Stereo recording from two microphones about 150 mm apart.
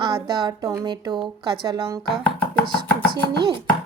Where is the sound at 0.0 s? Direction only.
30° right (ahead or behind).